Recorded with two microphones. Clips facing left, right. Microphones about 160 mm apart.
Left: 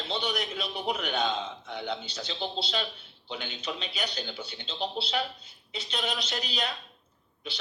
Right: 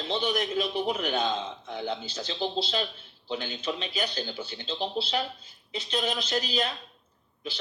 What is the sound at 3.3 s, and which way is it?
Speech, 40° right (ahead or behind).